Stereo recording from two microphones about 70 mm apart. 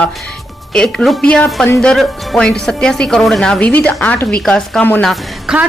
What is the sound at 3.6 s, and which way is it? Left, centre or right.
A man's voice, left.